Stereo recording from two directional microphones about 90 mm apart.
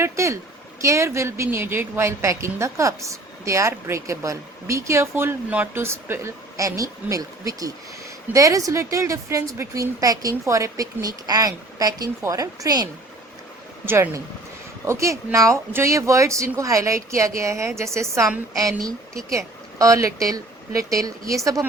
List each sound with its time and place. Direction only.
0.0 s a sound: 30° right (ahead or behind)
0.8 s a woman's voice: 35° right (ahead or behind)
13.8 s a woman's voice: 25° right (ahead or behind)